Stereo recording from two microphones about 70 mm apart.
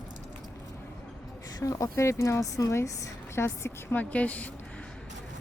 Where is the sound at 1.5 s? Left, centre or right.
Left.